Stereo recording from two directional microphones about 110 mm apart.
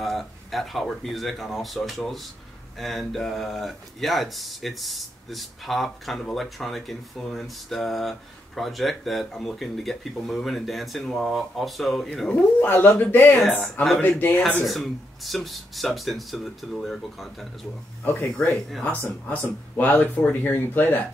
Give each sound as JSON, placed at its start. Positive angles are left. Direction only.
{"t": 0.0, "sound": "speech", "side_deg": 0}
{"t": 12.6, "sound": "speech", "side_deg": 20}
{"t": 14.7, "sound": "speech", "side_deg": 0}
{"t": 18.9, "sound": "speech", "side_deg": 15}